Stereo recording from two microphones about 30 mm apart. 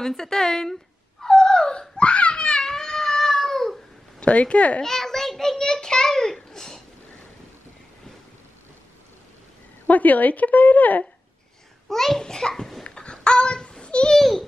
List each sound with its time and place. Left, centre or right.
0.0 s speech: centre
1.2 s a sound: left
2.6 s cat: centre
4.3 s speech: left
4.8 s child singing: centre
9.8 s speech: left
11.9 s speech: centre
12.8 s a sound: left